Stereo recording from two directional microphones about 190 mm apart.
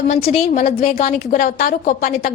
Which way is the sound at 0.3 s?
35° left (ahead or behind).